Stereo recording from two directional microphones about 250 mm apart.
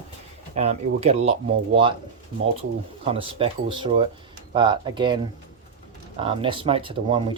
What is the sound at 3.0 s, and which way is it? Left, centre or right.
Speech, right.